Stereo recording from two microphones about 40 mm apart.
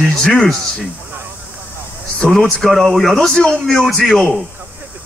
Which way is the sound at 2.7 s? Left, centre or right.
Centre.